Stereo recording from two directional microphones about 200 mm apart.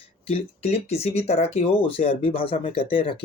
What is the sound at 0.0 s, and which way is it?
Speech, 30° left (ahead or behind).